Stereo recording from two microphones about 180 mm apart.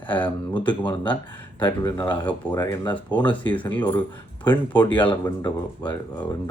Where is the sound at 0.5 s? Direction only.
25° left (ahead or behind).